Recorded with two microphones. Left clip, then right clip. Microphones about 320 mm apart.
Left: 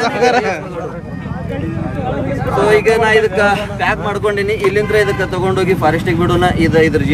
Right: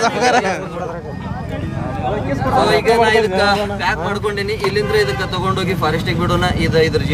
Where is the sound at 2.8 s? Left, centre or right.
Right.